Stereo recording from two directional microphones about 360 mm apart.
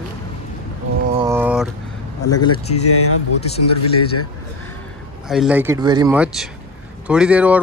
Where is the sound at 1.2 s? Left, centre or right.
Centre.